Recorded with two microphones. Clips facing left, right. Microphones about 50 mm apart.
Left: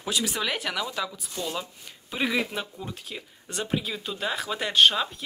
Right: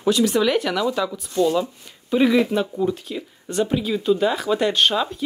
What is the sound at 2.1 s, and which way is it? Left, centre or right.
Speech, centre.